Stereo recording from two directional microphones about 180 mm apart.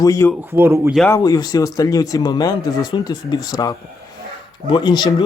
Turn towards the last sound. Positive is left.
turn(degrees=25)  # may be behind; listen again after turning